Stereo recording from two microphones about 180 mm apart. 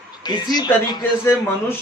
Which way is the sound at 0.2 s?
20° left (ahead or behind).